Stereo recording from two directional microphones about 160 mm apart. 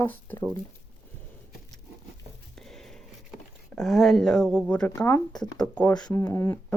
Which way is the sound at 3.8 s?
Centre (ahead or behind).